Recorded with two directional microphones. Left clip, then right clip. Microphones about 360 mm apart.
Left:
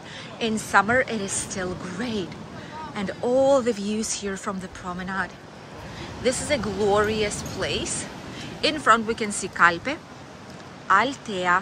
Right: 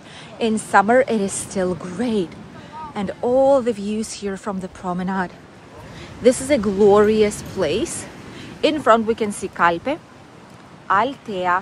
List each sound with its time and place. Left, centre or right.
0.4 s speech: centre